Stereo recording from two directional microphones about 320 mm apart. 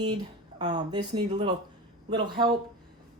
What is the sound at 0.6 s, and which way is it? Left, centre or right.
Speech, centre.